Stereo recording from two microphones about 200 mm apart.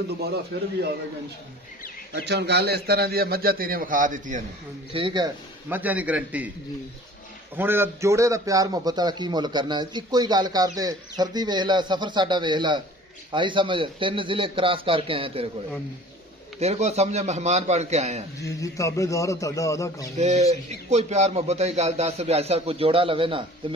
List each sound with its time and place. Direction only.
0.2 s a man's voice: 50° right (ahead or behind)
2.2 s a man's voice: 55° right (ahead or behind); by 4.4 s 40° right (ahead or behind)
4.9 s a man's voice: 25° right (ahead or behind)
5.7 s a man's voice: 10° right (ahead or behind)
7.5 s a man's voice: 10° right (ahead or behind); by 15.5 s 25° right (ahead or behind)
16.5 s a man's voice: 35° right (ahead or behind)
18.6 s a man's voice: 15° left (ahead or behind)
20.2 s a man's voice: 35° right (ahead or behind)